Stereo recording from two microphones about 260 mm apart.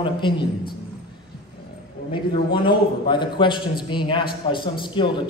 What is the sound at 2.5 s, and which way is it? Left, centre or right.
A man's voice, centre.